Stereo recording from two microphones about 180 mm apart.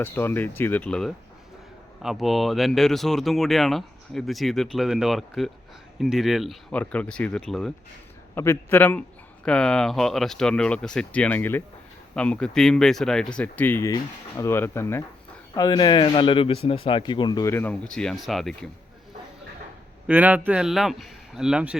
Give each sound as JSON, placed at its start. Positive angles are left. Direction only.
{"t": 0.0, "sound": "speech", "side_deg": 10}
{"t": 20.1, "sound": "speech", "side_deg": -10}